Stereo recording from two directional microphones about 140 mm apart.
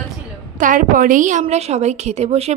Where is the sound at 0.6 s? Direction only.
75° right (ahead or behind).